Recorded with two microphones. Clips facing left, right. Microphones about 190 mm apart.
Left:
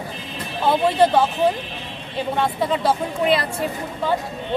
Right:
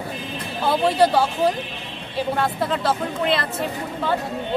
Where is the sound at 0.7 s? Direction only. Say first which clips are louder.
Left 1 dB; 5° right (ahead or behind).